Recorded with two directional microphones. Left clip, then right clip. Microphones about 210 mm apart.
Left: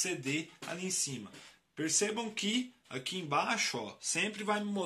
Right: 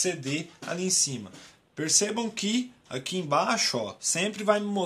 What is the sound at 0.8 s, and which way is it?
Speech, 50° right (ahead or behind).